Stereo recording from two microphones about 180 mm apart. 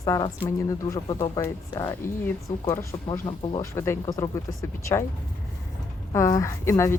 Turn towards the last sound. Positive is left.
turn(degrees=15)  # may be behind; listen again after turning